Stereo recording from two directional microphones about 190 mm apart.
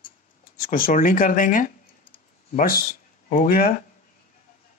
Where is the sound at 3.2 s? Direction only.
45° left (ahead or behind).